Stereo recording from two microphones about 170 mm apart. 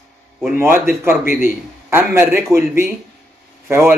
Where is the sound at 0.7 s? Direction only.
15° right (ahead or behind).